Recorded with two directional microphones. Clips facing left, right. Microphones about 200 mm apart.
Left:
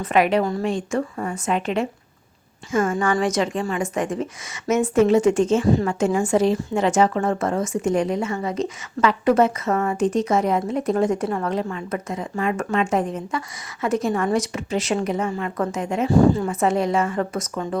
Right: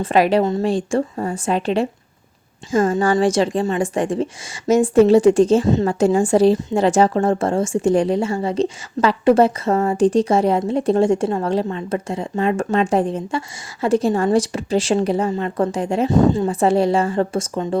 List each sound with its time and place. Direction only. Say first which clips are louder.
0.0 s a woman's voice: right 3 dB; 35° right (ahead or behind)
16.0 s speech: even; 20° right (ahead or behind)